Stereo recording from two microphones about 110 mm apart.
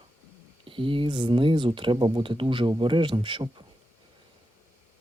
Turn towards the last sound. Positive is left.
turn(degrees=-50)  # may be behind; listen again after turning